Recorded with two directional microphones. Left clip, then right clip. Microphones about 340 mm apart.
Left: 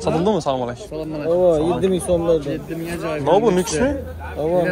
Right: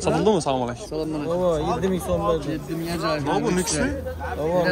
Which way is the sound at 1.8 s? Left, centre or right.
Centre.